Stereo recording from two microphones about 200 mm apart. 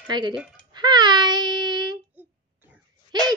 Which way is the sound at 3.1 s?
20° right (ahead or behind).